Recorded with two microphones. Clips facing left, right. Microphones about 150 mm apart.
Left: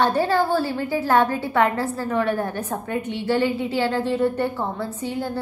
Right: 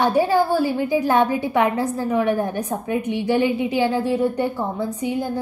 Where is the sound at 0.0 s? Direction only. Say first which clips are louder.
Right 2 dB; 10° right (ahead or behind).